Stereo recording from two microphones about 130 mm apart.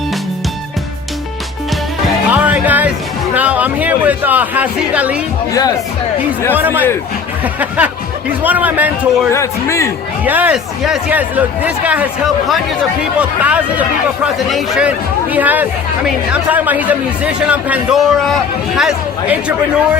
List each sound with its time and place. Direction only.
2.4 s music: 15° right (ahead or behind)
3.3 s speech: 10° right (ahead or behind)
5.5 s speech: 25° left (ahead or behind)
6.5 s speech: 15° right (ahead or behind)
9.3 s speech: 20° left (ahead or behind)
10.2 s speech: 10° right (ahead or behind)